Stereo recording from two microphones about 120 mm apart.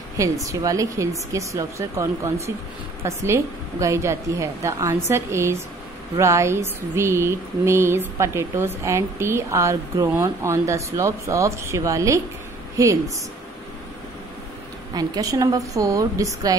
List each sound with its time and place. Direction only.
0.2 s speech: 30° right (ahead or behind)
15.0 s speech: 30° right (ahead or behind)